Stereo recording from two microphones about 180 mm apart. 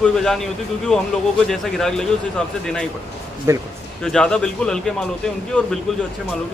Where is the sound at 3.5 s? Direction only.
15° right (ahead or behind).